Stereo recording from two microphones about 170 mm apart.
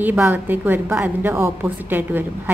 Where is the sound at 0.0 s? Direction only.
10° right (ahead or behind).